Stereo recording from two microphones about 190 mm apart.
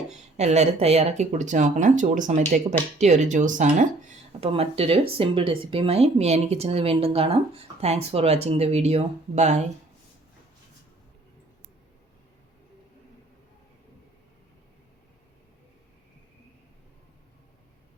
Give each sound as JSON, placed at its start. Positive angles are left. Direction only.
{"t": 0.1, "sound": "speech", "side_deg": -35}
{"t": 4.4, "sound": "speech", "side_deg": -30}